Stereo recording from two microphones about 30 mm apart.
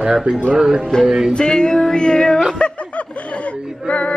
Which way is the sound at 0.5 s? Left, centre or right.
Right.